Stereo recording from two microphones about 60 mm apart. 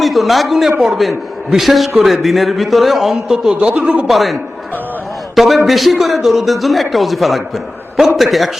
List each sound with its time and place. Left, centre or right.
0.0 s a man's voice: centre
3.5 s speech: centre
4.0 s a man's voice: centre